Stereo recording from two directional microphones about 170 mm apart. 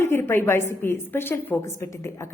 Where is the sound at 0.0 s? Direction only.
15° left (ahead or behind).